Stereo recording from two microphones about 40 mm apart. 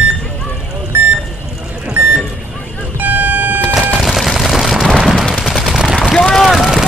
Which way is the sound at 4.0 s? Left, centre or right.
Centre.